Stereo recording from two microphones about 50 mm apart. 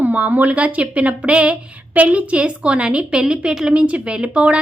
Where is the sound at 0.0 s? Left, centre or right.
Right.